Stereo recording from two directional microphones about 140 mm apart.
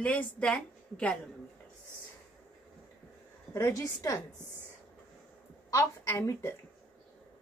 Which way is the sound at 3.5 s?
20° left (ahead or behind).